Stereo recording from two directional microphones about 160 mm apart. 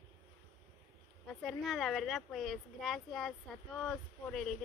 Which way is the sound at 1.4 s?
Centre (ahead or behind).